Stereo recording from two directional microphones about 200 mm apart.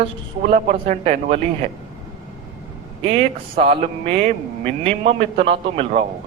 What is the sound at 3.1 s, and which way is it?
A man's voice, 30° right (ahead or behind).